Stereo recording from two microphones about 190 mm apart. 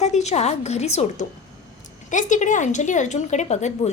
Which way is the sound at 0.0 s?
35° left (ahead or behind).